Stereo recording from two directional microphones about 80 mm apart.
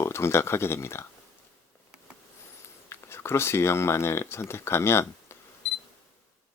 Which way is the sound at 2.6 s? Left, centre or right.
Left.